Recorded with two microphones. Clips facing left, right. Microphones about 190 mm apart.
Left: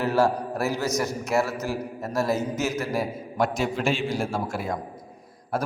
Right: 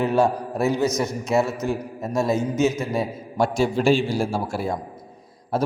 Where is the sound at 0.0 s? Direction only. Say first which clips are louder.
Right 2 dB; 20° right (ahead or behind).